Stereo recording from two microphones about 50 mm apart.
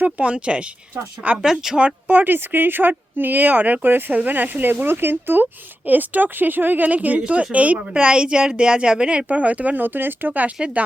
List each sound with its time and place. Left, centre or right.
0.0 s speech: right
2.0 s speech: right